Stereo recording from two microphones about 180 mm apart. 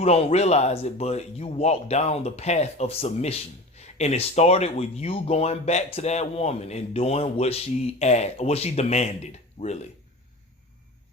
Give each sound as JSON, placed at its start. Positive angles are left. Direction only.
{"t": 0.0, "sound": "speech", "side_deg": 35}